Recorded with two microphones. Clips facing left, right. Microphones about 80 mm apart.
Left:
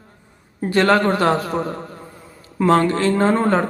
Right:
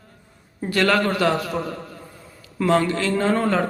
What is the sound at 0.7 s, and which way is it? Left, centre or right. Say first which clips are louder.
A man's voice: left 4 dB; left.